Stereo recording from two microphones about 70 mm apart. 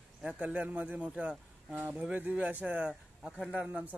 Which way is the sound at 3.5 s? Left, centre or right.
Centre.